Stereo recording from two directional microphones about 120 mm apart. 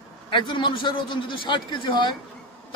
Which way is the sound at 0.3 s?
40° left (ahead or behind).